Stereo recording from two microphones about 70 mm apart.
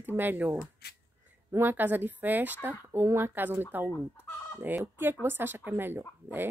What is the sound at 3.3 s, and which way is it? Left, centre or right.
Speech, right.